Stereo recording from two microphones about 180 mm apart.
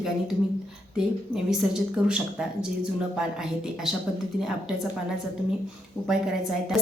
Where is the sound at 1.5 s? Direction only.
5° right (ahead or behind).